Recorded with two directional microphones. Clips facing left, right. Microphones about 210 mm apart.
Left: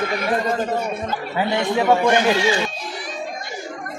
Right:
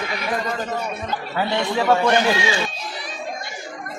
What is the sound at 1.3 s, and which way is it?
Speech, 15° left (ahead or behind).